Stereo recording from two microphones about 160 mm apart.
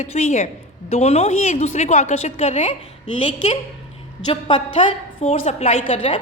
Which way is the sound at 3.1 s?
30° left (ahead or behind).